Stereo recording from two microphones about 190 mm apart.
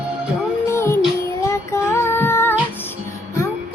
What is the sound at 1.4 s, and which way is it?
Child singing, 15° left (ahead or behind).